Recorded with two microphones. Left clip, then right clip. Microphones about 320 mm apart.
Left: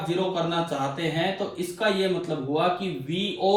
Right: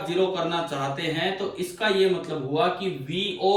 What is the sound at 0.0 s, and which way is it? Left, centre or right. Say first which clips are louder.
A man's voice: right 2 dB; centre.